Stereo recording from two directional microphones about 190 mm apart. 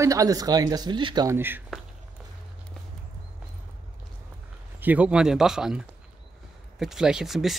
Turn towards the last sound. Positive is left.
turn(degrees=0)  # may be behind; listen again after turning